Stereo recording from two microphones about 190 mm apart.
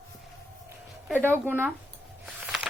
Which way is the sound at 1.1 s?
10° right (ahead or behind).